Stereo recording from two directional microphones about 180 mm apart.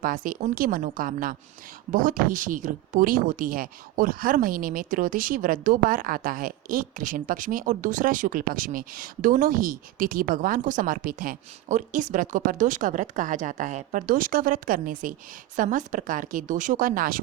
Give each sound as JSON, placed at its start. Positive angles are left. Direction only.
{"t": 0.0, "sound": "speech", "side_deg": -50}